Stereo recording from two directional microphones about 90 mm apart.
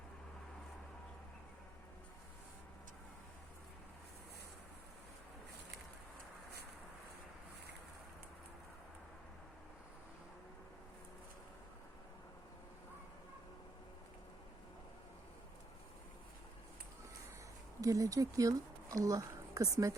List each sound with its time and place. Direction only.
17.7 s speech: 40° right (ahead or behind)